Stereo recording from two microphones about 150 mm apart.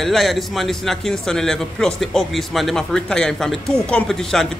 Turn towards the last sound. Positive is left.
turn(degrees=5)  # may be behind; listen again after turning